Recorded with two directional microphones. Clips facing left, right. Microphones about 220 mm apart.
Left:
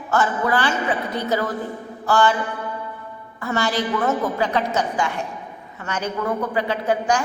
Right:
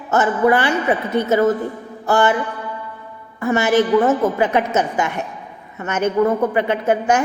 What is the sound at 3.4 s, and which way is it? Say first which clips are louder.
A woman's voice: right 7 dB; 20° right (ahead or behind).